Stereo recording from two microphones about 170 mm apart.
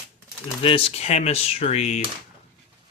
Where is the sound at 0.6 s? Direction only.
35° left (ahead or behind).